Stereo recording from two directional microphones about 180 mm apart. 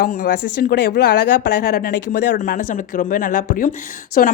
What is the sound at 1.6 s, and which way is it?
Speech, 50° left (ahead or behind).